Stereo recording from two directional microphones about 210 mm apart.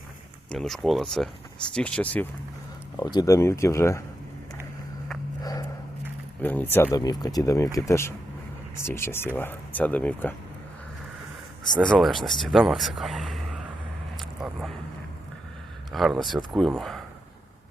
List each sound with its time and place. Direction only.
0.5 s speech: centre (ahead or behind)
3.0 s speech: 15° left (ahead or behind)
5.4 s a sound: 20° left (ahead or behind)
6.4 s speech: 10° left (ahead or behind)
11.8 s speech: centre (ahead or behind)
14.2 s vehicle: centre (ahead or behind)
15.9 s speech: centre (ahead or behind)